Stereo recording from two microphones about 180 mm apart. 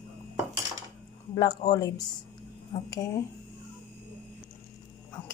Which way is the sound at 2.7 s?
35° left (ahead or behind).